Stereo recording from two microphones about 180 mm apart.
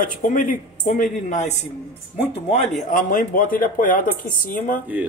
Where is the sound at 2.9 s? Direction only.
50° left (ahead or behind).